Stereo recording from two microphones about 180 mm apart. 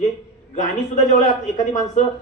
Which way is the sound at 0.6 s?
40° left (ahead or behind).